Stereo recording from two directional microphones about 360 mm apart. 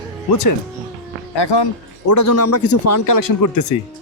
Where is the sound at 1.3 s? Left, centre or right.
Left.